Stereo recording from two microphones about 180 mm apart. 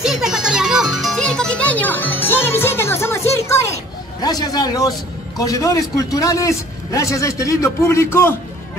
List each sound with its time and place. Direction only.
0.0 s music: 5° right (ahead or behind); by 4.9 s 20° left (ahead or behind)
5.4 s a man's voice: 20° left (ahead or behind)